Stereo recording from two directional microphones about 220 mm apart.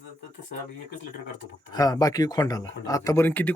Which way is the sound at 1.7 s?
15° left (ahead or behind).